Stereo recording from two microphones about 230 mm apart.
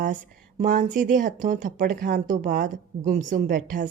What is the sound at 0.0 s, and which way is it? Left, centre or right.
Speech, right.